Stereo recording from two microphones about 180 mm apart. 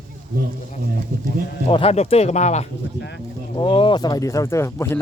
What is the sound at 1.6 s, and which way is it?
Speech, 35° left (ahead or behind).